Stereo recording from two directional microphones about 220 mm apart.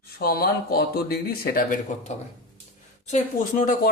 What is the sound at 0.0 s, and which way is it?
Speech, 45° left (ahead or behind).